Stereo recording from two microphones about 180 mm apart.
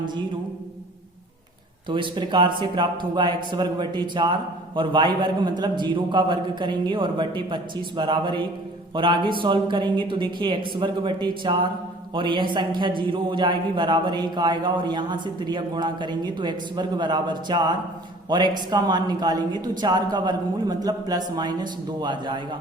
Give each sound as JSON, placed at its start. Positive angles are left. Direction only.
{"t": 0.0, "sound": "music", "side_deg": -25}
{"t": 1.9, "sound": "a man's voice", "side_deg": -25}